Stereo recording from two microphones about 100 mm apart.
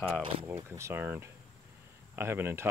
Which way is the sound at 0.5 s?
25° right (ahead or behind).